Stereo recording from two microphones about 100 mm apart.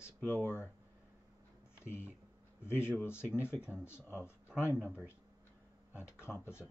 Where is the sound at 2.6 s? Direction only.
25° left (ahead or behind).